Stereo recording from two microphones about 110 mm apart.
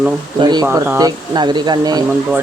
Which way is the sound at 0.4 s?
40° right (ahead or behind).